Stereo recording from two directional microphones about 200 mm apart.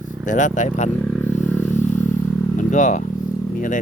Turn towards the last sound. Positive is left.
turn(degrees=40)  # may be behind; listen again after turning